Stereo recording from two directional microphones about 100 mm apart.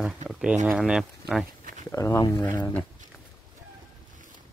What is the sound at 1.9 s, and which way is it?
Speech, 30° left (ahead or behind).